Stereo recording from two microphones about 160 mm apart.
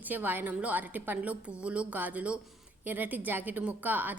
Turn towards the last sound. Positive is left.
turn(degrees=-10)  # may be behind; listen again after turning